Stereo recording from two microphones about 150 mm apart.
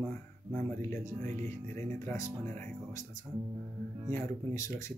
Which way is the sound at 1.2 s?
55° right (ahead or behind).